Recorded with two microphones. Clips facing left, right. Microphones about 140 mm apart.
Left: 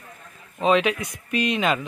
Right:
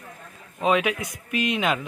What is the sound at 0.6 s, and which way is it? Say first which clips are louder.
Speech: left 2 dB; 5° right (ahead or behind).